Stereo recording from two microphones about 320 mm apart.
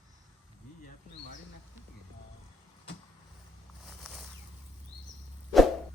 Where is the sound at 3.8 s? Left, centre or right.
Centre.